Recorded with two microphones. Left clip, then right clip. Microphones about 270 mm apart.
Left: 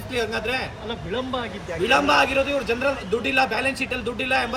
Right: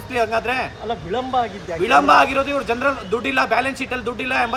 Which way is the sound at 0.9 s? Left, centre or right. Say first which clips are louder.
Right 4 dB; right.